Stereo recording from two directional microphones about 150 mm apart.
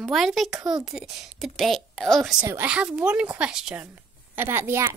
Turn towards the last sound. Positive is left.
turn(degrees=-15)  # may be behind; listen again after turning